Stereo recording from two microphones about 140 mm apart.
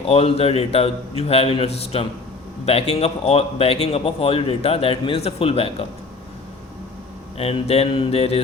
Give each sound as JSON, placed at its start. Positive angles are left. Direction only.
{"t": 0.0, "sound": "a man's voice", "side_deg": 45}
{"t": 7.3, "sound": "a man's voice", "side_deg": 45}